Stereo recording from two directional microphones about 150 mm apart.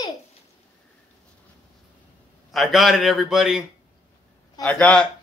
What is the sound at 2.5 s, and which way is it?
Speech, centre (ahead or behind).